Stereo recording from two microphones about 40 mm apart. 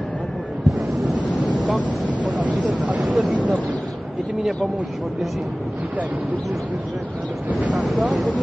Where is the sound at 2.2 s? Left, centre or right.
Right.